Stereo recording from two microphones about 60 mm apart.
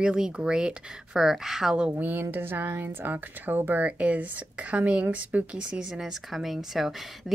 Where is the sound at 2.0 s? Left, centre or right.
Right.